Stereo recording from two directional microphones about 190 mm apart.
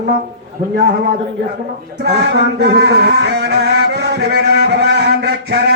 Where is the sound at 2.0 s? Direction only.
60° right (ahead or behind).